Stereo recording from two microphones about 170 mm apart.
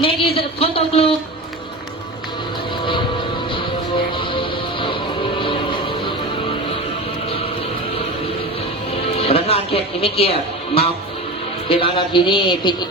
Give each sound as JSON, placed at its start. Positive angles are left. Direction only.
{"t": 0.0, "sound": "a sound", "side_deg": 30}
{"t": 3.5, "sound": "music", "side_deg": 30}
{"t": 8.9, "sound": "music", "side_deg": 35}
{"t": 11.7, "sound": "a man's voice", "side_deg": 30}